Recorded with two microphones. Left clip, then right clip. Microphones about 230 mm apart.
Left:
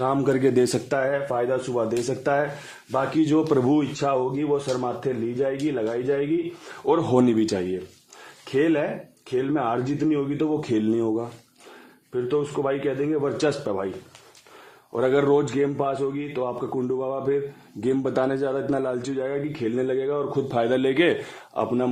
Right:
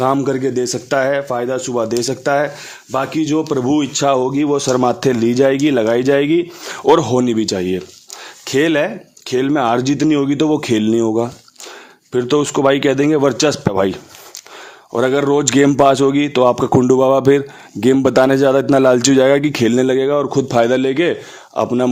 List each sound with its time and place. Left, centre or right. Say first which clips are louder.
0.3 s speech: right 3 dB; centre
0.5 s speech: right 2 dB; centre
0.9 s a man's voice: right 8 dB; right
4.0 s a man's voice: right 9 dB; right
7.1 s a man's voice: right 5 dB; right
9.3 s a man's voice: right 9 dB; right
12.1 s a man's voice: right 9 dB; right
13.3 s speech: right 8 dB; right
14.9 s speech: right 6 dB; right
15.5 s a man's voice: right 13 dB; right